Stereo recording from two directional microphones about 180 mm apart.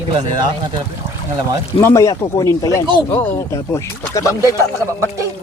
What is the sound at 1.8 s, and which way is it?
Speech, 15° left (ahead or behind).